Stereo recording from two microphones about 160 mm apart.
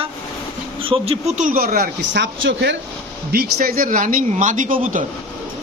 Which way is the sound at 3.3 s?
65° right (ahead or behind).